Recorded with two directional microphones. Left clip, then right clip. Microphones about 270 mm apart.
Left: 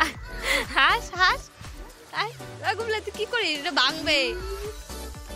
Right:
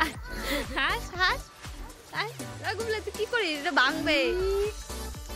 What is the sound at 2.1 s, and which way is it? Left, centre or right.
Speech, centre.